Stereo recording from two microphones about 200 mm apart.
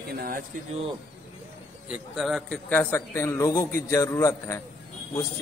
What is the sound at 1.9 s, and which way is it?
A man's voice, centre (ahead or behind).